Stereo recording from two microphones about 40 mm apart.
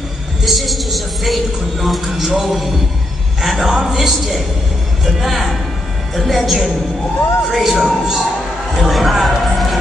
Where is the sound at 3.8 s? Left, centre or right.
Centre.